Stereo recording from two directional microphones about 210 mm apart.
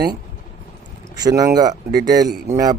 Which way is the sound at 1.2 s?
15° right (ahead or behind).